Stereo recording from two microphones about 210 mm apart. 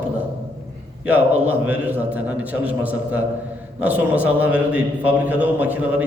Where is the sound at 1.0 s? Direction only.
10° right (ahead or behind).